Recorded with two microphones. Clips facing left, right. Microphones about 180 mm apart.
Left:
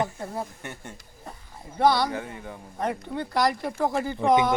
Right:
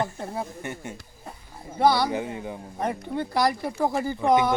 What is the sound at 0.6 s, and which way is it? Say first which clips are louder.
A man's voice: right 5 dB; 5° right (ahead or behind).